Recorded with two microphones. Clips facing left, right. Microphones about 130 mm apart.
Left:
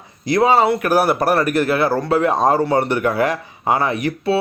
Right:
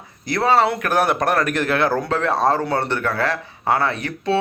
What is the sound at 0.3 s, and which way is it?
Speech, 15° left (ahead or behind).